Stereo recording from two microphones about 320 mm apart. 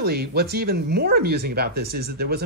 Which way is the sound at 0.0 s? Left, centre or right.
Right.